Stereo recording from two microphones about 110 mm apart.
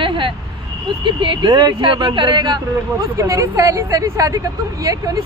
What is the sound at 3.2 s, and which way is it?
Speech, 30° right (ahead or behind).